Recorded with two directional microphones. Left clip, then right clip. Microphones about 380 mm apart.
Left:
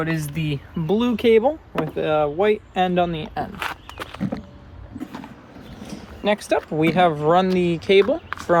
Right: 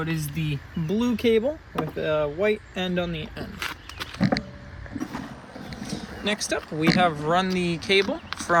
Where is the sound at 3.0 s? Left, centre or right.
Left.